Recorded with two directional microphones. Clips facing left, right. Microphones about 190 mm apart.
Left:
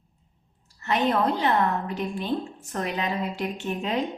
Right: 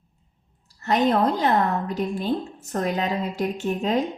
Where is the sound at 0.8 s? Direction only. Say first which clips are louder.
Right 3 dB; 40° right (ahead or behind).